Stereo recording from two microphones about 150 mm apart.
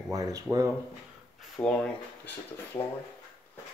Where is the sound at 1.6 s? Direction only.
20° left (ahead or behind).